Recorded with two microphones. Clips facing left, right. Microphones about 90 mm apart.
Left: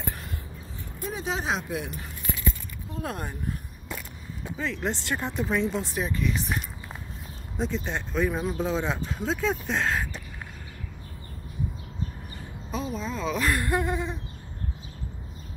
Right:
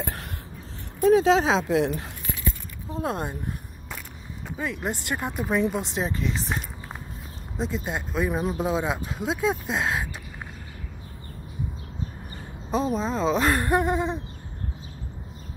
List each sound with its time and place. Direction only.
0.0 s a sound: 70° right (ahead or behind)
1.1 s speech: 90° right
2.9 s speech: 25° right (ahead or behind)
4.6 s speech: 10° right (ahead or behind); by 6.6 s 30° right (ahead or behind)
7.5 s speech: 5° right (ahead or behind)
12.7 s speech: 35° right (ahead or behind)